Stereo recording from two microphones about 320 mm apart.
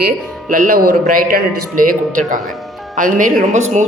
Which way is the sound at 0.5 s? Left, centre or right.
Right.